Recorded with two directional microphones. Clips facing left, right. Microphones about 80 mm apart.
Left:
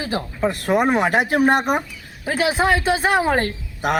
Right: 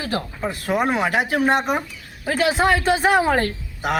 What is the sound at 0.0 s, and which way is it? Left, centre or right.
Speech, centre.